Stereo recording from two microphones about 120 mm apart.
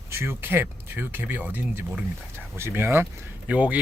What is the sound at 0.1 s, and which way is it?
Speech, 20° right (ahead or behind).